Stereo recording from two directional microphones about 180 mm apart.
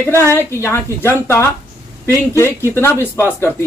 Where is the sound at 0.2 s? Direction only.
15° left (ahead or behind).